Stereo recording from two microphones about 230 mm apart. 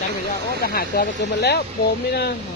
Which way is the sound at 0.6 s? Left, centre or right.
Left.